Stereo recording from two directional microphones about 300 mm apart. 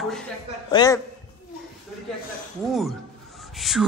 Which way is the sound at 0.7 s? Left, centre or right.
Centre.